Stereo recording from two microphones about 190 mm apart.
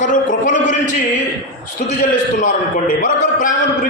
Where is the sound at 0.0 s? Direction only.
40° left (ahead or behind).